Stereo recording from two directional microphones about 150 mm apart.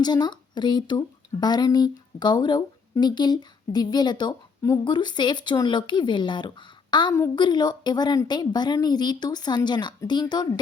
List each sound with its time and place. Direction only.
0.0 s speech: 30° left (ahead or behind)